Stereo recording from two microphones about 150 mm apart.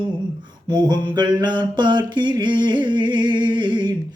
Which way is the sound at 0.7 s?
30° right (ahead or behind).